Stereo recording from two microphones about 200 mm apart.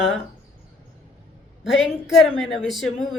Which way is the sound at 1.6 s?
Centre (ahead or behind).